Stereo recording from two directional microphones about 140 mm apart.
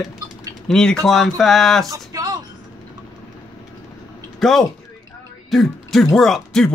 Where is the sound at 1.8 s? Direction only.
25° right (ahead or behind).